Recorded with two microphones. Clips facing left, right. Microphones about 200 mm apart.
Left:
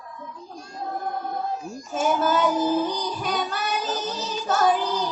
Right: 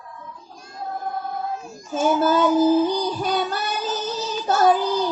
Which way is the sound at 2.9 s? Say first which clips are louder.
Right 4 dB; 30° right (ahead or behind).